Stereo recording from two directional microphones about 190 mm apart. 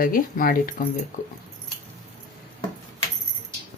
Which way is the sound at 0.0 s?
50° left (ahead or behind).